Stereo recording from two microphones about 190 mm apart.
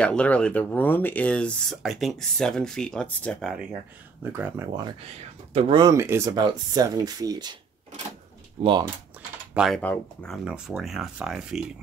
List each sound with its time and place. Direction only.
0.0 s speech: 5° left (ahead or behind)
4.2 s speech: 10° right (ahead or behind)
5.5 s speech: 30° right (ahead or behind)
8.6 s speech: 30° right (ahead or behind)
9.5 s speech: 5° right (ahead or behind)